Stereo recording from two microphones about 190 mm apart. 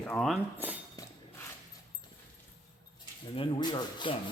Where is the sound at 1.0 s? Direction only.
20° left (ahead or behind).